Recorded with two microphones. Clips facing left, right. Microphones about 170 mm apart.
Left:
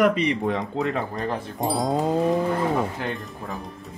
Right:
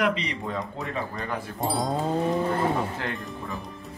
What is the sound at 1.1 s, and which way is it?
Speech, 35° left (ahead or behind).